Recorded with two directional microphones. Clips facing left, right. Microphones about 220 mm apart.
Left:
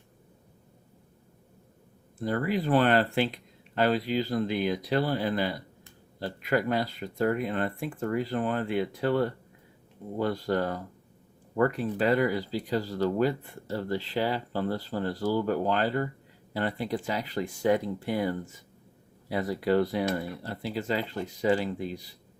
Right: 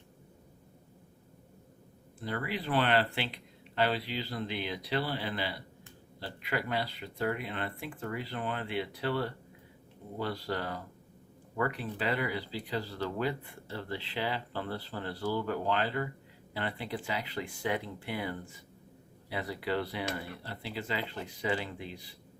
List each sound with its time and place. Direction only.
2.2 s speech: 45° left (ahead or behind)